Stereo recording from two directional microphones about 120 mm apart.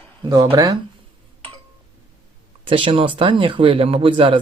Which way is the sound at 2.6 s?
50° right (ahead or behind).